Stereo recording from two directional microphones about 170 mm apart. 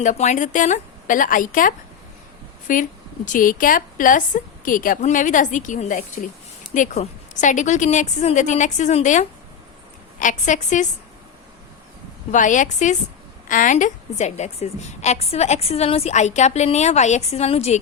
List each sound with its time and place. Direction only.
0.0 s a woman's voice: 45° left (ahead or behind)
12.3 s a woman's voice: 50° left (ahead or behind)